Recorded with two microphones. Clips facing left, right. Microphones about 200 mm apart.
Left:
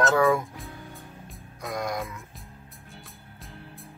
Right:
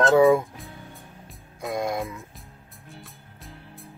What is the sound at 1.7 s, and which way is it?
Speech, 25° right (ahead or behind).